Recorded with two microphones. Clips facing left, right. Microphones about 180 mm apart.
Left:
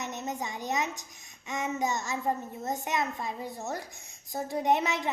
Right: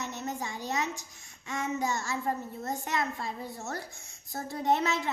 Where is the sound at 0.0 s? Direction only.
20° left (ahead or behind).